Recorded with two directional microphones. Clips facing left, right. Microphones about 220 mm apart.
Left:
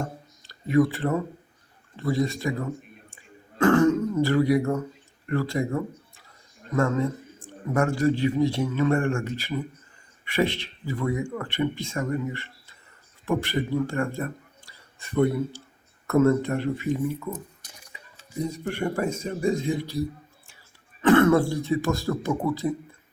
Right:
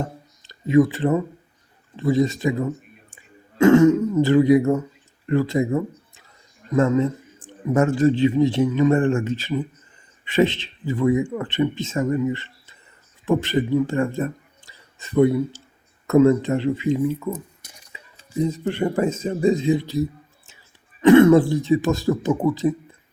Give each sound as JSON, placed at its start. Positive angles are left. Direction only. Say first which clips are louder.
{"t": 0.0, "sound": "a sound", "louder": "right 3 dB", "side_deg": -20}
{"t": 2.0, "sound": "a man's voice", "louder": "right 6 dB", "side_deg": -20}
{"t": 18.3, "sound": "speech", "louder": "right 6 dB", "side_deg": -20}
{"t": 21.0, "sound": "speech", "louder": "right 6 dB", "side_deg": -15}